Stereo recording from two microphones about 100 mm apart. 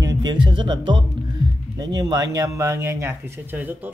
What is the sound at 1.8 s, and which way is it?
Speech, 45° right (ahead or behind).